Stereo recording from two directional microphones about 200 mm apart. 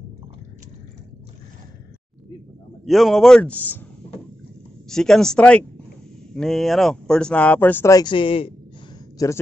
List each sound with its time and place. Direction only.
2.8 s a man's voice: centre (ahead or behind)
4.8 s a man's voice: centre (ahead or behind)